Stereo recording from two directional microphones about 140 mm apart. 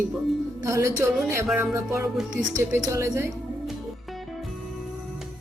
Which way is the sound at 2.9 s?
20° right (ahead or behind).